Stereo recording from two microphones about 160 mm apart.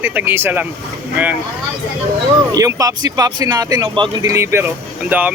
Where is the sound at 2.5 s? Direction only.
20° right (ahead or behind).